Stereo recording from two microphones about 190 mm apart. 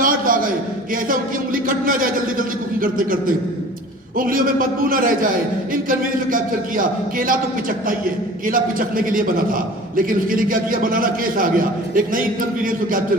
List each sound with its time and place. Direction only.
0.0 s a sound: 45° right (ahead or behind)
1.6 s a man's voice: 45° right (ahead or behind)
8.4 s a man's voice: 45° right (ahead or behind)